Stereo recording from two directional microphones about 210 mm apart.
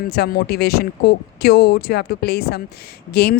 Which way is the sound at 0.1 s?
50° left (ahead or behind).